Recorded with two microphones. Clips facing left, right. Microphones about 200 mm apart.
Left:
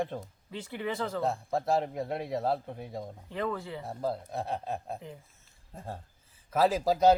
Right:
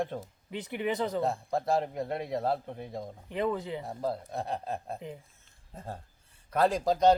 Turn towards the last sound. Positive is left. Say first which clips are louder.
# even
turn(degrees=5)  # may be behind; listen again after turning